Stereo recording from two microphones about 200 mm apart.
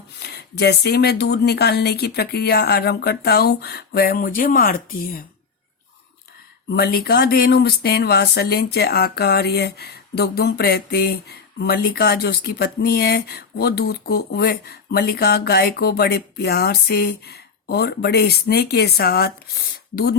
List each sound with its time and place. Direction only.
0.2 s speech: 55° left (ahead or behind)
6.7 s speech: 50° left (ahead or behind)